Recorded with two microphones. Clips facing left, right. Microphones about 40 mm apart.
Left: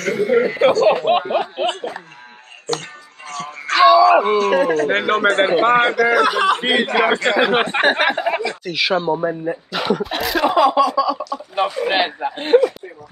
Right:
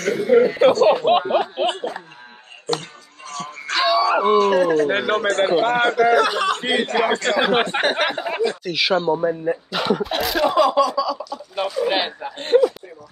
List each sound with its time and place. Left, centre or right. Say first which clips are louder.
0.0 s speech: right 1 dB; centre
3.3 s music: left 4 dB; centre
3.8 s speech: left 7 dB; centre
5.2 s speech: left 5 dB; left
6.0 s speech: left 2 dB; centre
7.3 s speech: left 2 dB; centre
8.6 s speech: left 2 dB; centre
10.4 s speech: left 2 dB; centre
11.5 s a sound: left 3 dB; left
12.0 s speech: left 5 dB; left